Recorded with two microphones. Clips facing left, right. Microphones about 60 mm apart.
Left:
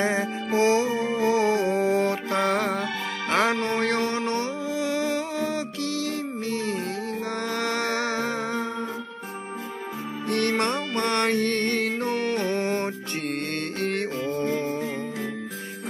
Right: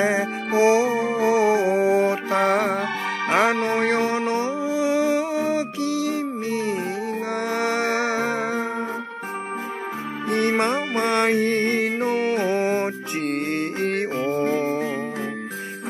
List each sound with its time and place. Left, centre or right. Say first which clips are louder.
0.0 s music: right 3 dB; centre
10.2 s music: right 3 dB; centre